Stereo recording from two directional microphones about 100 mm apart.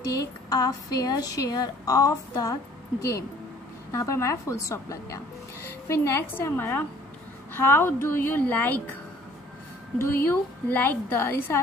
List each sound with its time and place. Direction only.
0.0 s a woman's voice: 40° left (ahead or behind)
3.9 s a woman's voice: 30° left (ahead or behind)
9.9 s a woman's voice: 20° left (ahead or behind)